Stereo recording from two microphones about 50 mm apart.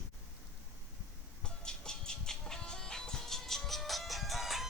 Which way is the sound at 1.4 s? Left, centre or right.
Centre.